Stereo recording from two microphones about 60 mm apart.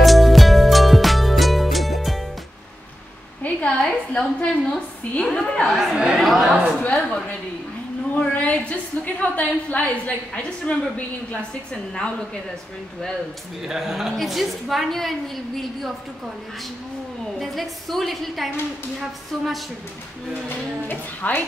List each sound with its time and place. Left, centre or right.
0.0 s music: centre
3.4 s a sound: centre
5.2 s a woman's voice: centre
5.7 s a woman's voice: centre
6.8 s a woman's voice: centre
8.1 s a woman's voice: left
13.7 s a woman's voice: centre
17.4 s a woman's voice: centre
20.4 s a woman's voice: left